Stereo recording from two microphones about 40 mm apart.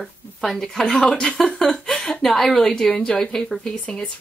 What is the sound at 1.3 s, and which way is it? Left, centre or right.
A woman's voice, centre.